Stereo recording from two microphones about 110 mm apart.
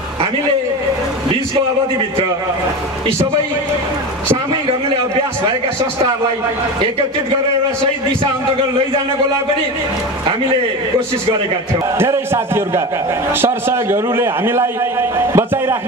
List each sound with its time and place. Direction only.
12.0 s a man's voice: 20° right (ahead or behind)